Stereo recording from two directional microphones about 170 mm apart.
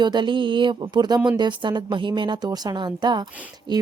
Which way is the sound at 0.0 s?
25° right (ahead or behind).